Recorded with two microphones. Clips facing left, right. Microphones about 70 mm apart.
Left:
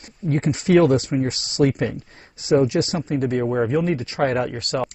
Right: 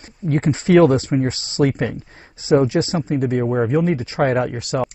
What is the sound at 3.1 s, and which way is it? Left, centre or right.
Speech, centre.